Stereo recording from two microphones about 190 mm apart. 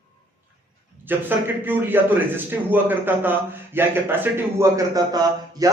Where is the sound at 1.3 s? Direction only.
10° right (ahead or behind).